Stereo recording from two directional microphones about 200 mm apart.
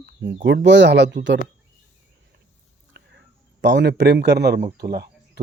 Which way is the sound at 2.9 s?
55° right (ahead or behind).